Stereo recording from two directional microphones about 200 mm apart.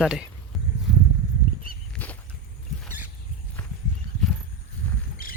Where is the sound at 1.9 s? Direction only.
5° left (ahead or behind).